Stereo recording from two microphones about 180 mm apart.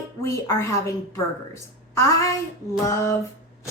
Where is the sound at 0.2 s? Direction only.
15° left (ahead or behind).